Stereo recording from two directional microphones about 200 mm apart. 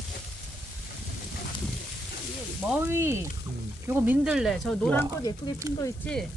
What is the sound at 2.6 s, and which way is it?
Speech, 10° right (ahead or behind).